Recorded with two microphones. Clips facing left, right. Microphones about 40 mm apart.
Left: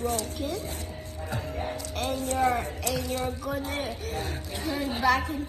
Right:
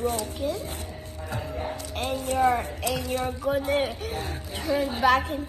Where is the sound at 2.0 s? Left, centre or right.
Right.